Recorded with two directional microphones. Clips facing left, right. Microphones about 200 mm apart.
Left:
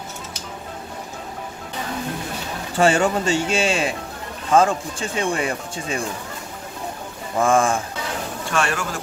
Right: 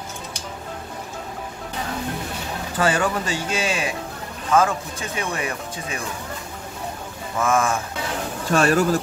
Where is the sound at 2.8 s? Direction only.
25° left (ahead or behind).